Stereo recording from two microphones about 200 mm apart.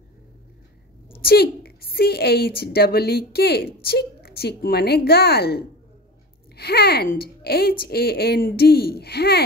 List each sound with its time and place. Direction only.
1.2 s speech: 50° left (ahead or behind)